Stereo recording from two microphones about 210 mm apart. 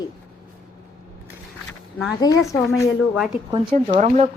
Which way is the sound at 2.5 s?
15° left (ahead or behind).